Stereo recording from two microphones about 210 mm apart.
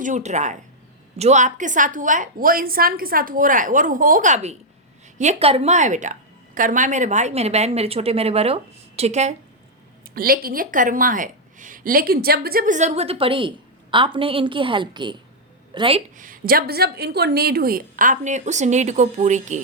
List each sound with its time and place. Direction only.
0.0 s a woman's voice: 35° right (ahead or behind)
10.2 s a woman's voice: 45° right (ahead or behind)